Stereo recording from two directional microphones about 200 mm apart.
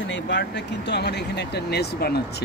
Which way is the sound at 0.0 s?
65° left (ahead or behind).